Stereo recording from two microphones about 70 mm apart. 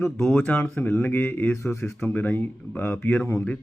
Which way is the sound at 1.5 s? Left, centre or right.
Left.